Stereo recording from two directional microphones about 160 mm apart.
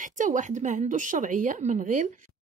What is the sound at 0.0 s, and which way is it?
Speech, 55° right (ahead or behind).